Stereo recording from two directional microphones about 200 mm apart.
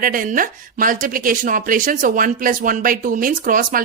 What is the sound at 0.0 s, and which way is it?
Speech, 45° right (ahead or behind).